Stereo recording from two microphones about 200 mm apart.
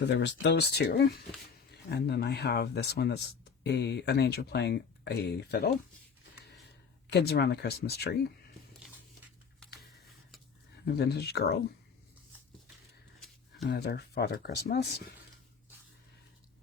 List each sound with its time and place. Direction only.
0.1 s speech: 60° left (ahead or behind)
7.1 s speech: 55° left (ahead or behind)
10.8 s speech: 55° left (ahead or behind)
13.1 s a sound: centre (ahead or behind)
13.7 s speech: 55° left (ahead or behind)